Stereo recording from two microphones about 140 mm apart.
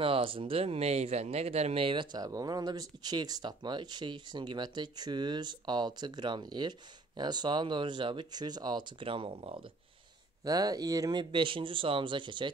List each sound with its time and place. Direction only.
0.0 s speech: 40° right (ahead or behind)
10.4 s speech: 25° right (ahead or behind)